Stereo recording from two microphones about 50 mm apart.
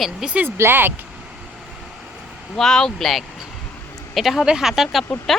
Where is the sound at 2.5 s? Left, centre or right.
Centre.